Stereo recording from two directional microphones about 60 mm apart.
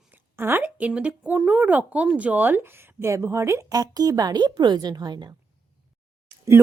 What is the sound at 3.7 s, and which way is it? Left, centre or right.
Speech, right.